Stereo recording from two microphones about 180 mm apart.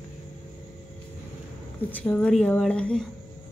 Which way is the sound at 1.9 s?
5° left (ahead or behind).